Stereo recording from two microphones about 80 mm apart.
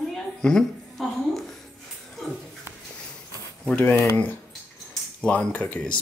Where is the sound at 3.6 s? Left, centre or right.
Centre.